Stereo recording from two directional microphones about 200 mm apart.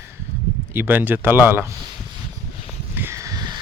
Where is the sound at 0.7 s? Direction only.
10° right (ahead or behind).